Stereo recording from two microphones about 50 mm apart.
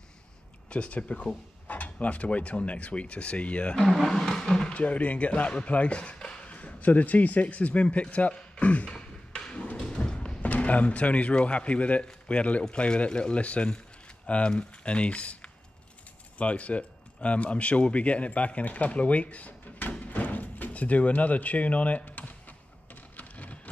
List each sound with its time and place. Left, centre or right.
0.7 s speech: left
3.8 s speech: centre
4.1 s roaring cats: centre
4.7 s speech: left
9.8 s thump: centre
10.4 s speech: left
23.1 s a sound: left